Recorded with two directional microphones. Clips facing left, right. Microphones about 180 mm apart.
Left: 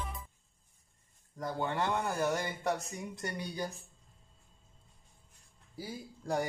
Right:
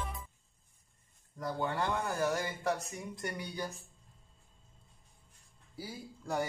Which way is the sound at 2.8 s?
30° left (ahead or behind).